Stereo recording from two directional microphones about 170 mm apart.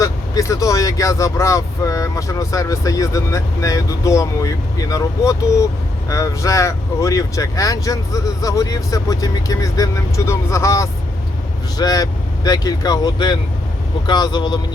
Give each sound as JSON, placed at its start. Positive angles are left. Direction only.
{"t": 0.0, "sound": "speech", "side_deg": 20}